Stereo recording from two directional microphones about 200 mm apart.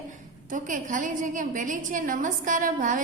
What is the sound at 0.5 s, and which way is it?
A woman's voice, 40° right (ahead or behind).